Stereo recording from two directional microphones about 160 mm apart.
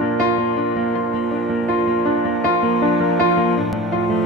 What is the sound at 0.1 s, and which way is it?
Music, centre (ahead or behind).